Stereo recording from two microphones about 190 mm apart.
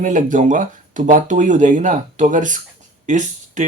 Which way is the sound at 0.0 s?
40° right (ahead or behind).